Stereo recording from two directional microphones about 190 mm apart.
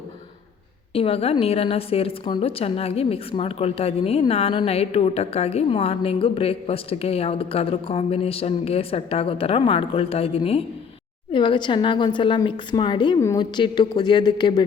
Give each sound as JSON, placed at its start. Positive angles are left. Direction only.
{"t": 0.9, "sound": "a woman's voice", "side_deg": 30}